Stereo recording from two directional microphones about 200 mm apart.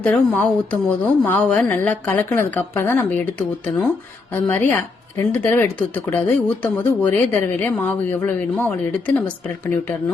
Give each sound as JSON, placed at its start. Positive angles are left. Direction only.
{"t": 0.0, "sound": "speech", "side_deg": 5}